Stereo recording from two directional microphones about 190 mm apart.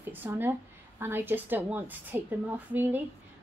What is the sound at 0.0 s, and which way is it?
A woman's voice, 10° right (ahead or behind).